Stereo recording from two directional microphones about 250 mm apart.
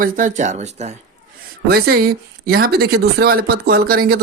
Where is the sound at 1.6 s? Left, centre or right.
Right.